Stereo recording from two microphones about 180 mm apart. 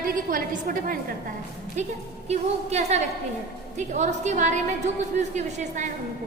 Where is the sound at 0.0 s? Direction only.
50° right (ahead or behind).